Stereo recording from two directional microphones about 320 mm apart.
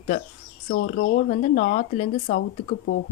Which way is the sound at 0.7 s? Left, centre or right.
Left.